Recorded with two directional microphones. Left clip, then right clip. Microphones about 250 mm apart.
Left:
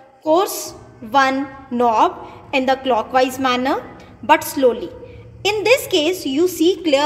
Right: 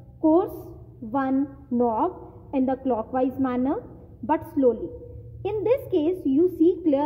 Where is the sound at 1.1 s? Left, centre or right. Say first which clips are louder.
Left 10 dB; centre.